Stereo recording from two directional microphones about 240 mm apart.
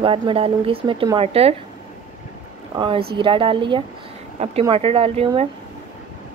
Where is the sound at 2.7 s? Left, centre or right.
Right.